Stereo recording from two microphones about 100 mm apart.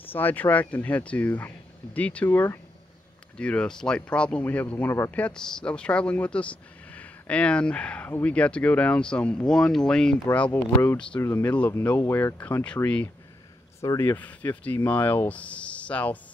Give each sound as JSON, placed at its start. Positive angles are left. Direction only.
{"t": 0.0, "sound": "speech", "side_deg": 20}
{"t": 5.1, "sound": "speech", "side_deg": 10}
{"t": 10.5, "sound": "speech", "side_deg": 25}